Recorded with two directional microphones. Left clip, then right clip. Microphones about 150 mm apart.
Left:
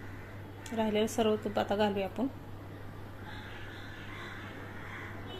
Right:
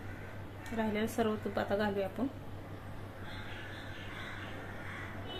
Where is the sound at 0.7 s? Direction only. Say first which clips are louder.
Left 4 dB; 15° left (ahead or behind).